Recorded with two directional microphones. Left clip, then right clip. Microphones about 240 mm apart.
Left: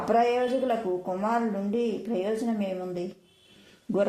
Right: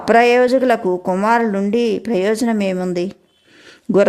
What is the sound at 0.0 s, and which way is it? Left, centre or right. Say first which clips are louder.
Speech: right 12 dB; right.